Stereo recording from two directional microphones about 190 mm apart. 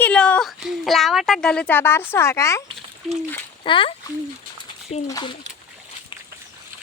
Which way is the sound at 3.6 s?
25° left (ahead or behind).